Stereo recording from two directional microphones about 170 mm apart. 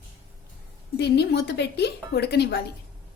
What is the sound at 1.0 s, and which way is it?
Speech, 75° left (ahead or behind).